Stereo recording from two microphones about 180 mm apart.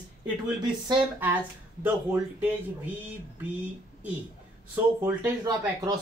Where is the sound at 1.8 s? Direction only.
10° right (ahead or behind).